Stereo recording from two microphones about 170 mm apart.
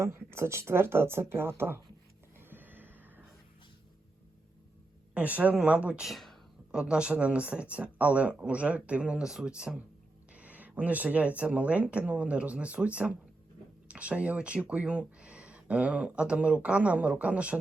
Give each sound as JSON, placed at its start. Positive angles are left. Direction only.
{"t": 0.0, "sound": "speech", "side_deg": -15}
{"t": 2.4, "sound": "a sound", "side_deg": -10}
{"t": 5.1, "sound": "speech", "side_deg": -10}